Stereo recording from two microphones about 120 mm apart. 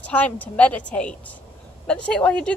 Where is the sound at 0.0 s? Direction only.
10° left (ahead or behind).